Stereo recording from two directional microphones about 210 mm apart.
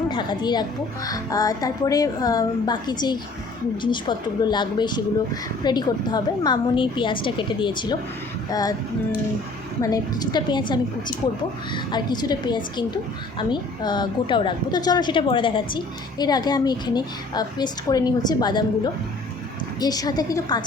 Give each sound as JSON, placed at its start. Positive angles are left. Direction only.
{"t": 0.1, "sound": "a woman's voice", "side_deg": 20}
{"t": 4.4, "sound": "a woman's voice", "side_deg": 20}
{"t": 9.8, "sound": "a woman's voice", "side_deg": 20}
{"t": 19.8, "sound": "a woman's voice", "side_deg": 20}